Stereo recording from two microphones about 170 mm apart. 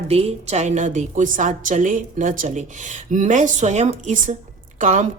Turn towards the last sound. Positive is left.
turn(degrees=-50)  # may be behind; listen again after turning